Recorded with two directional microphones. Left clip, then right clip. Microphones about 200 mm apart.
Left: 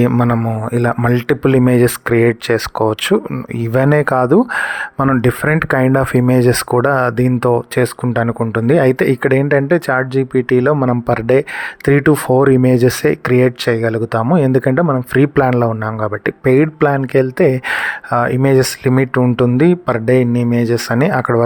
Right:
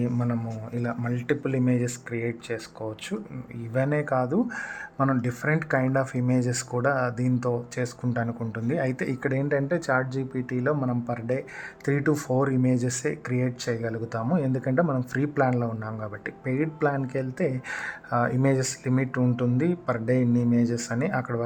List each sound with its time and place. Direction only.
0.0 s a man's voice: 40° left (ahead or behind)